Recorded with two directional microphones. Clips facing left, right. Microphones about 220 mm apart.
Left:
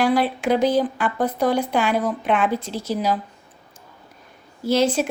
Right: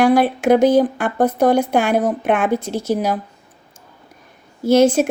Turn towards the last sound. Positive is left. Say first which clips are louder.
# right 6 dB
turn(degrees=-45)  # may be behind; listen again after turning